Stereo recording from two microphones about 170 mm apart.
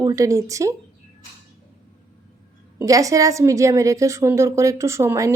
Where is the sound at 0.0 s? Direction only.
20° right (ahead or behind).